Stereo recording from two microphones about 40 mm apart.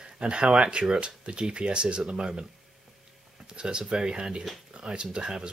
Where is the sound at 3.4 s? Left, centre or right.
Right.